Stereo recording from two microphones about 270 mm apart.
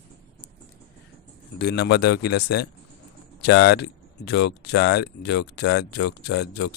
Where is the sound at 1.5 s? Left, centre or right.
Left.